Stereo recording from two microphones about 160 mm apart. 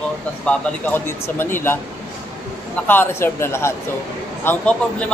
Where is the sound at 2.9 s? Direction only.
15° left (ahead or behind).